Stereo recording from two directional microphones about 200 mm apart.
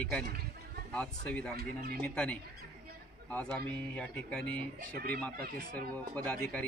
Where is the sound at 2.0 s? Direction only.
5° left (ahead or behind).